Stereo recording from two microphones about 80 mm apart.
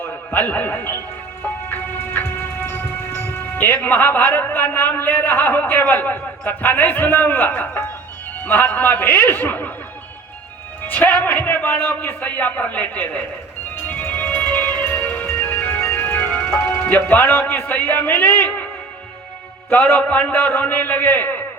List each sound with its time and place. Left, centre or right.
0.0 s a man's voice: left
10.8 s a man's voice: left
13.8 s music: centre
17.1 s a man's voice: left
19.7 s music: centre
20.5 s a man's voice: centre